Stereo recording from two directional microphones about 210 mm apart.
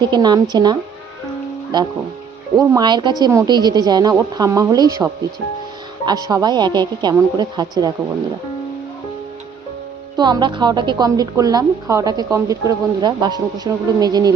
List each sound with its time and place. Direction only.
0.0 s a woman's voice: 20° right (ahead or behind)
10.2 s a woman's voice: 20° right (ahead or behind)